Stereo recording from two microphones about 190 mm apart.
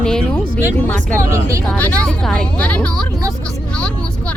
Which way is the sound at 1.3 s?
15° right (ahead or behind).